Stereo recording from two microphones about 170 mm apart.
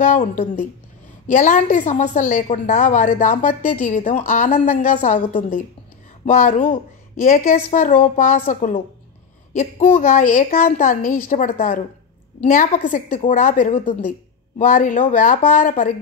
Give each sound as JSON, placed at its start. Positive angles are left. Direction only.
{"t": 0.0, "sound": "a woman's voice", "side_deg": 45}